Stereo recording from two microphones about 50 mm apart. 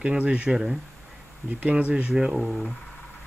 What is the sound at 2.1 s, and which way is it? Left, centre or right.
Speech, centre.